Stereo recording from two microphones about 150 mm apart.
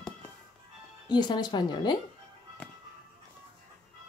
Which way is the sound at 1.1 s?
30° left (ahead or behind).